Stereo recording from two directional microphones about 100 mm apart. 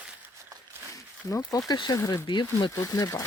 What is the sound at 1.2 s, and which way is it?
Speech, 35° left (ahead or behind).